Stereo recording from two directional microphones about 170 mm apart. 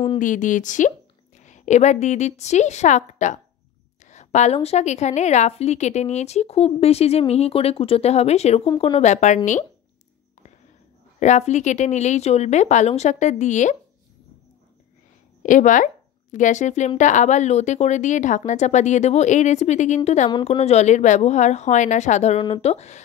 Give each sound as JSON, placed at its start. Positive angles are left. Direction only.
{"t": 0.2, "sound": "a woman's voice", "side_deg": 50}
{"t": 11.1, "sound": "speech", "side_deg": 45}
{"t": 15.4, "sound": "a woman's voice", "side_deg": 50}